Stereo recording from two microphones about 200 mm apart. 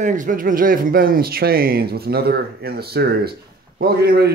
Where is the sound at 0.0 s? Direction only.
40° right (ahead or behind).